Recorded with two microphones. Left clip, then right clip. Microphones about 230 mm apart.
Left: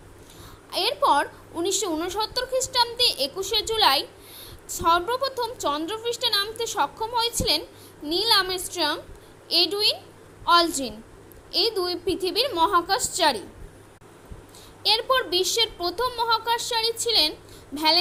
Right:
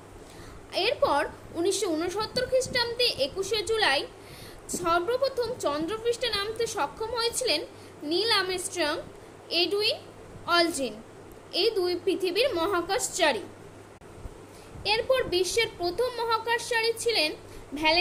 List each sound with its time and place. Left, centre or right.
0.7 s a woman's voice: left
14.8 s a woman's voice: left